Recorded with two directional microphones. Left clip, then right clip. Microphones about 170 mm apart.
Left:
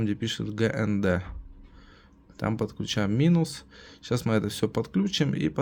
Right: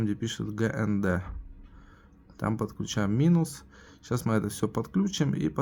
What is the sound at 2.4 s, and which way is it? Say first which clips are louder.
Speech: left 2 dB; 25° left (ahead or behind).